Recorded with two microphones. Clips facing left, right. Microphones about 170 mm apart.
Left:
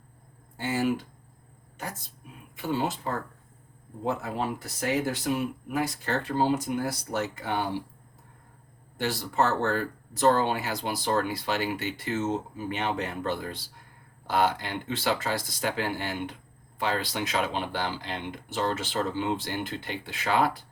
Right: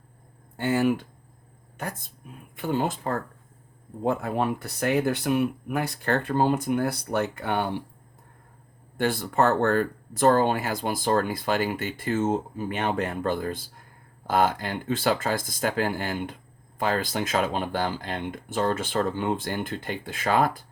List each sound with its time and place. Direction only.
0.5 s speech: 60° right (ahead or behind)
9.0 s speech: 55° right (ahead or behind)